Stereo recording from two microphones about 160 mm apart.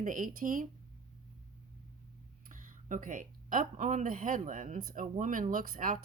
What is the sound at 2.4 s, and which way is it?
Speech, 55° right (ahead or behind).